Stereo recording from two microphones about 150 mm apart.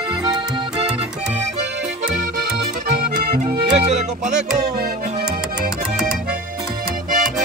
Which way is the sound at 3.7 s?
45° right (ahead or behind).